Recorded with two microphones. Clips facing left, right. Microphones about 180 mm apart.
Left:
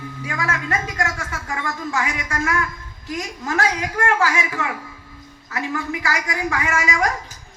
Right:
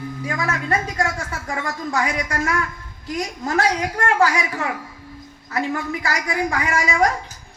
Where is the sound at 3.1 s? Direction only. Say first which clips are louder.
Right 2 dB; 35° right (ahead or behind).